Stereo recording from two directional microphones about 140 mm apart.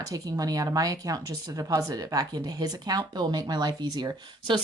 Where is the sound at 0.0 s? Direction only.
25° right (ahead or behind).